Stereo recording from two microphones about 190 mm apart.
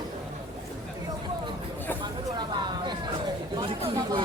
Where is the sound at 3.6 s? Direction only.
25° right (ahead or behind).